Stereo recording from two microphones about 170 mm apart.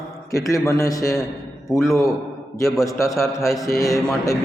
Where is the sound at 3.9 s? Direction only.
20° left (ahead or behind).